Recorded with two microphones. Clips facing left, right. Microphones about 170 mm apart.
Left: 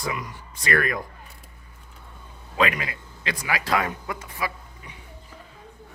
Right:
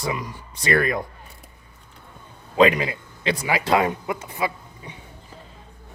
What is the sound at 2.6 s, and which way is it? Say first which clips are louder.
A man's voice: right 7 dB; 25° right (ahead or behind).